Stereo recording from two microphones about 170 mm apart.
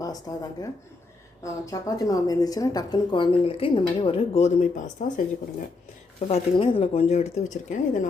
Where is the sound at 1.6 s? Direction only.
20° left (ahead or behind); by 4.7 s 40° left (ahead or behind).